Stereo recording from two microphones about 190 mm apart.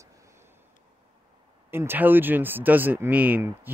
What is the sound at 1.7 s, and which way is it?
Speech, 10° right (ahead or behind).